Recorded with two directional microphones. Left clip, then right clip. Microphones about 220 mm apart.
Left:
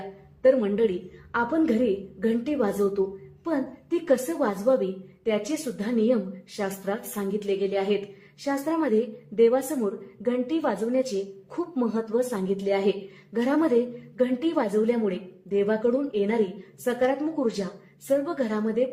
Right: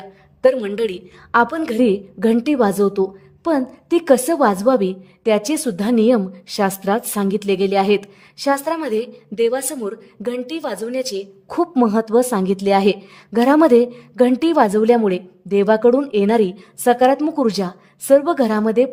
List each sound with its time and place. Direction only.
0.4 s a woman's voice: 50° right (ahead or behind)